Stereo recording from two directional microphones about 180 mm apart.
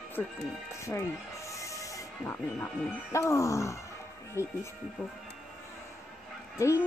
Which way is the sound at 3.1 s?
15° left (ahead or behind).